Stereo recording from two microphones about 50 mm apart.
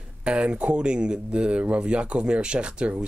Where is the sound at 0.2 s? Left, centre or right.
Right.